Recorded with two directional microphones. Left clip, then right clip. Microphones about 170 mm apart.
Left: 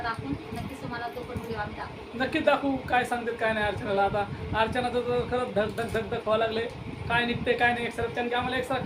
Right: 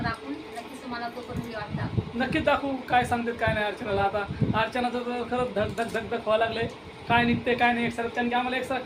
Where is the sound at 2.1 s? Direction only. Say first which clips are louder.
Even; 15° right (ahead or behind).